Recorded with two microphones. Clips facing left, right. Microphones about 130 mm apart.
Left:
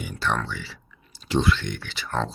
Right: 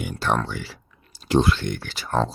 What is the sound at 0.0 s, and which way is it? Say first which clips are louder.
Speech: right 3 dB; 50° right (ahead or behind).